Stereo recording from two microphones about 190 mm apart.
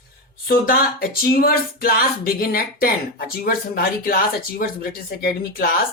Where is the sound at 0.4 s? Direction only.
50° left (ahead or behind).